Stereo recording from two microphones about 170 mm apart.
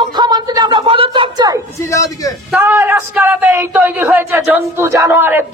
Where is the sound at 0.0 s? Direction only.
25° right (ahead or behind).